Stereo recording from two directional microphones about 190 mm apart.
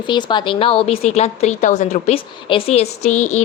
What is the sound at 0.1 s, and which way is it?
A woman's voice, 25° left (ahead or behind).